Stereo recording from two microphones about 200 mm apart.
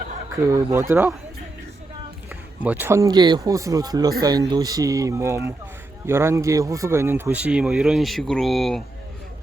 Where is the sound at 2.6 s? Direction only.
10° right (ahead or behind).